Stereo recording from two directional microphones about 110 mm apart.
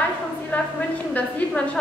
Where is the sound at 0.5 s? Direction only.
15° left (ahead or behind).